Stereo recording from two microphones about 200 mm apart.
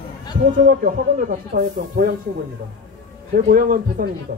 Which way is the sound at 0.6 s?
45° right (ahead or behind).